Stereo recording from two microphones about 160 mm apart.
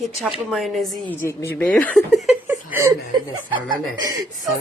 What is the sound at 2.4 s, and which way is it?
Chuckle, 15° right (ahead or behind).